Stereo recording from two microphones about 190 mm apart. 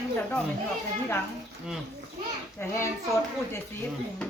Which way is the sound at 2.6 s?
15° left (ahead or behind).